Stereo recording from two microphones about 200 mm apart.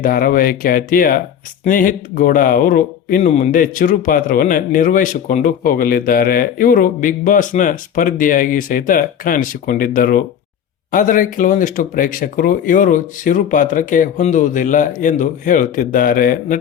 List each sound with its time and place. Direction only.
0.0 s speech: 45° left (ahead or behind)